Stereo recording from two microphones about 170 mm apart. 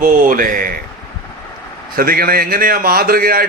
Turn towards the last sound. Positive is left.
turn(degrees=-60)  # may be behind; listen again after turning